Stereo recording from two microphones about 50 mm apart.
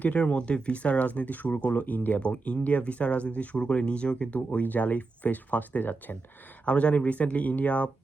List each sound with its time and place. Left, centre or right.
0.0 s speech: left
6.7 s speech: left